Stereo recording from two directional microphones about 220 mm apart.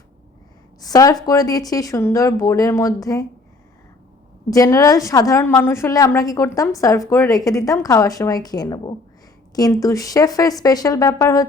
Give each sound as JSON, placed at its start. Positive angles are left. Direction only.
{"t": 0.8, "sound": "a woman's voice", "side_deg": 15}
{"t": 4.4, "sound": "a woman's voice", "side_deg": 15}